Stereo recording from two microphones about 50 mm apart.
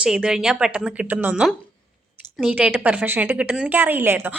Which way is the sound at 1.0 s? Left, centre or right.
Right.